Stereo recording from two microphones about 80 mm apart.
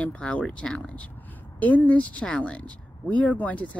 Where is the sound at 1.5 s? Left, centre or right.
Left.